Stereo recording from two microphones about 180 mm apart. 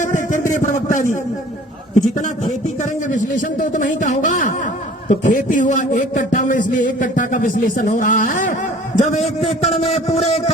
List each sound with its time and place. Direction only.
0.0 s a sound: 45° left (ahead or behind)
0.5 s a man's voice: 40° left (ahead or behind)
3.1 s a man's voice: 45° left (ahead or behind)